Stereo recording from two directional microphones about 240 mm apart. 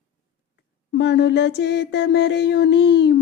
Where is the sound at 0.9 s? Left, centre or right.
Left.